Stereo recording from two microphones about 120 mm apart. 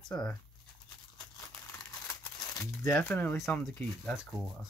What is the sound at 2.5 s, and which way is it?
Speech, 25° left (ahead or behind).